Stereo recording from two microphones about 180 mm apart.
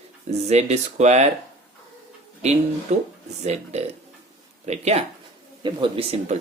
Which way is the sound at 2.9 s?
40° right (ahead or behind).